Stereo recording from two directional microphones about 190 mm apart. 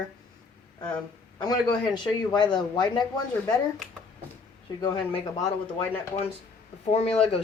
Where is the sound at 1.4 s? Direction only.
20° left (ahead or behind).